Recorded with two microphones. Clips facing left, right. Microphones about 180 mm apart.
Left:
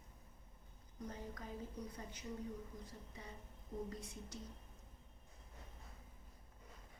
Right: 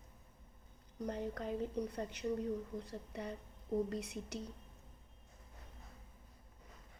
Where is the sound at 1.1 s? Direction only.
70° right (ahead or behind).